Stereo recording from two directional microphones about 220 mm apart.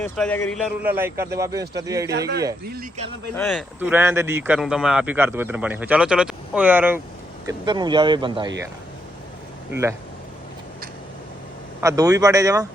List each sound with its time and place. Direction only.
0.0 s speech: 10° left (ahead or behind)
0.9 s speech: 10° right (ahead or behind)
2.0 s speech: 45° right (ahead or behind)
3.3 s speech: 10° left (ahead or behind)
3.8 s speech: 10° right (ahead or behind)
7.4 s speech: 20° right (ahead or behind)
11.8 s speech: 15° right (ahead or behind)